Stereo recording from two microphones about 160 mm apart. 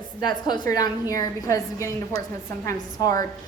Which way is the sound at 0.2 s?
25° left (ahead or behind).